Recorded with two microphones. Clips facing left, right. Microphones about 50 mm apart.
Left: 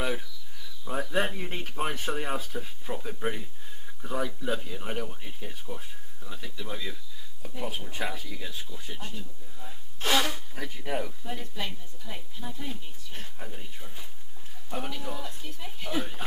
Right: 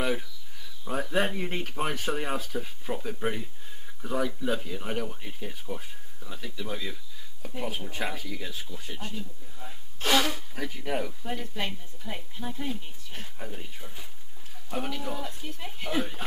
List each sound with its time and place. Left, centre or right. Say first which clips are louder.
0.0 s a sound: right 2 dB; centre
0.8 s speech: right 1 dB; centre
11.5 s a woman's voice: right 3 dB; right
13.1 s speech: right 2 dB; centre
15.6 s a woman's voice: right 1 dB; right
16.0 s speech: right 3 dB; centre